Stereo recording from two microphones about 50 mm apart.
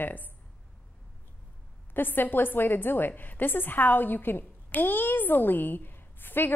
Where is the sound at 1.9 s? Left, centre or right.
Left.